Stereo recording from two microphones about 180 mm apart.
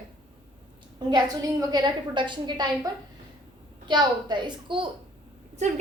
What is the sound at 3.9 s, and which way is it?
A woman's voice, 25° right (ahead or behind).